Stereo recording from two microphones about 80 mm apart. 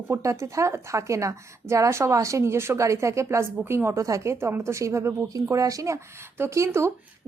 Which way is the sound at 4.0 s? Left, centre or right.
Right.